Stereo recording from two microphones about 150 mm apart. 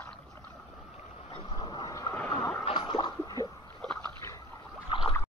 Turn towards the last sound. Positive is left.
turn(degrees=35)  # may be behind; listen again after turning